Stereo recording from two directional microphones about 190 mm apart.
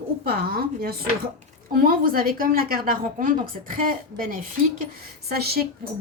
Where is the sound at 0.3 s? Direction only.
55° right (ahead or behind).